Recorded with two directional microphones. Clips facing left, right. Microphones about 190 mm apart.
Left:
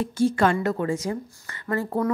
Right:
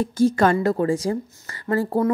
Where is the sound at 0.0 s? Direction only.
40° right (ahead or behind).